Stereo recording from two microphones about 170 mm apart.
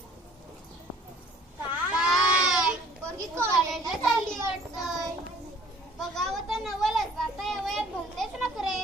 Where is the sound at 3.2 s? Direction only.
15° right (ahead or behind).